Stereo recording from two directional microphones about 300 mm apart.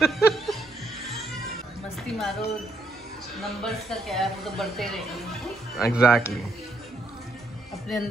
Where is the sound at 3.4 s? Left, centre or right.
Centre.